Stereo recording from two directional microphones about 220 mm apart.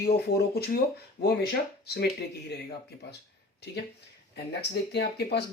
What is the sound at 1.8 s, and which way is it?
Speech, 45° left (ahead or behind).